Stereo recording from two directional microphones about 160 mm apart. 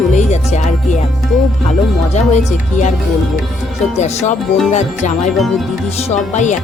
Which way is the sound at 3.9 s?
45° left (ahead or behind).